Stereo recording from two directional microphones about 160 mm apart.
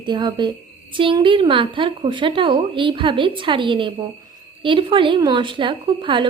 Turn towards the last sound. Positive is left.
turn(degrees=-30)  # may be behind; listen again after turning